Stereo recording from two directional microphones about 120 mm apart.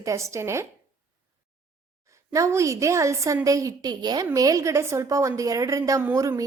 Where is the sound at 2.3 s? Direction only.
25° right (ahead or behind).